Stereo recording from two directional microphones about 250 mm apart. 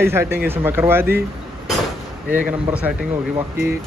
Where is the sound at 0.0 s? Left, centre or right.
Centre.